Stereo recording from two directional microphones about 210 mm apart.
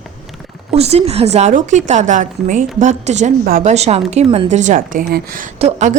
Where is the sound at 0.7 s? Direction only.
30° right (ahead or behind).